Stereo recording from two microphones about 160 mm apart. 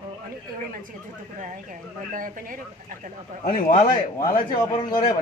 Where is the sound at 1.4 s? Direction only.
55° right (ahead or behind).